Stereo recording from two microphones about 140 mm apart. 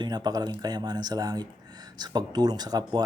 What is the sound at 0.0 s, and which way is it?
Speech, 30° right (ahead or behind).